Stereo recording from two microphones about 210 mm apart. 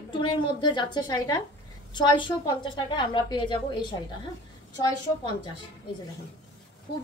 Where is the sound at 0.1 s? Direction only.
20° left (ahead or behind).